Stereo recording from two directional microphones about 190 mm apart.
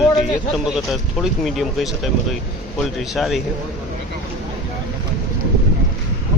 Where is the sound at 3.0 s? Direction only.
Centre (ahead or behind).